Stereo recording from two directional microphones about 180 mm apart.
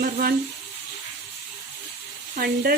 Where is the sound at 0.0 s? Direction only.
55° right (ahead or behind).